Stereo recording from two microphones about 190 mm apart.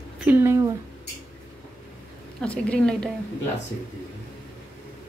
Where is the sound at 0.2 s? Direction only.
10° right (ahead or behind).